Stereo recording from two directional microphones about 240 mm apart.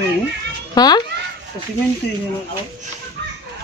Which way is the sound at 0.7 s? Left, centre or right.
Centre.